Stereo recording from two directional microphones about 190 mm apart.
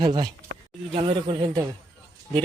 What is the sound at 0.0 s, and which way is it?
Speech, 20° right (ahead or behind).